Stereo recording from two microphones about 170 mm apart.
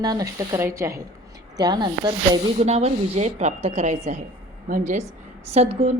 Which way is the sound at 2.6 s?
40° right (ahead or behind).